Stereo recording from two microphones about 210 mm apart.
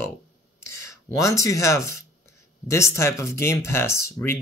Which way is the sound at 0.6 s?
15° left (ahead or behind).